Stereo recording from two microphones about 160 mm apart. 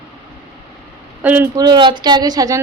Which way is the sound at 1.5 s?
25° right (ahead or behind).